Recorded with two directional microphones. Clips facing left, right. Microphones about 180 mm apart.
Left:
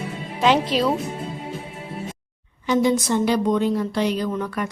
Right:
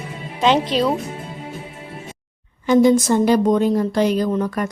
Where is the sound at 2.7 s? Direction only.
45° right (ahead or behind).